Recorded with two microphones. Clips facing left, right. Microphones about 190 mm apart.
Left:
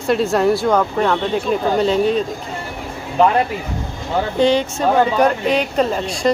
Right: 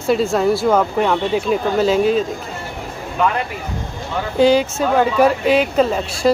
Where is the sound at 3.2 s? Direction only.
30° left (ahead or behind).